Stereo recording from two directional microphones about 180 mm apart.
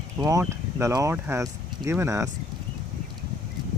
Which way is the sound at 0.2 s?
20° right (ahead or behind).